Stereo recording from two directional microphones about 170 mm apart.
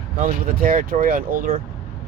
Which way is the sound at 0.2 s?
55° right (ahead or behind).